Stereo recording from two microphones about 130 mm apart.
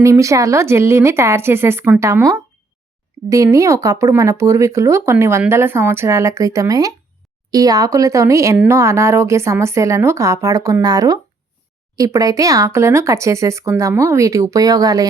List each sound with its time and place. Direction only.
0.0 s speech: 25° right (ahead or behind)